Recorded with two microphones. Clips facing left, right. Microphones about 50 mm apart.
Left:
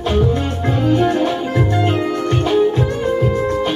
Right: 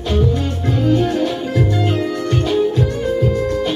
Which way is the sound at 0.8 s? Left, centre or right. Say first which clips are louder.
Left 1 dB; centre.